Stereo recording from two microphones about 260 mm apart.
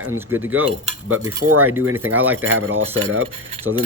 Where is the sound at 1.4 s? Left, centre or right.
Right.